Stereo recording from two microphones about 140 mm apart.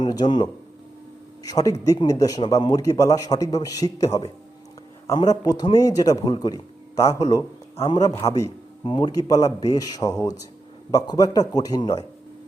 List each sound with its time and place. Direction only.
0.0 s a man's voice: 30° left (ahead or behind)